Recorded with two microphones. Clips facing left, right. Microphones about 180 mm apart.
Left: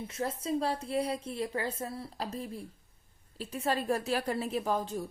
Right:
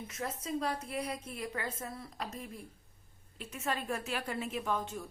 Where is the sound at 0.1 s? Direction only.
30° left (ahead or behind).